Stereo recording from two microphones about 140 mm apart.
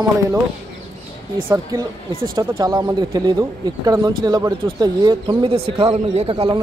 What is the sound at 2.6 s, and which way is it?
A man's voice, 30° right (ahead or behind).